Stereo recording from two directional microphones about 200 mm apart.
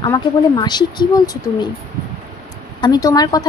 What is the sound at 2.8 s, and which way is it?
Speech, 20° left (ahead or behind).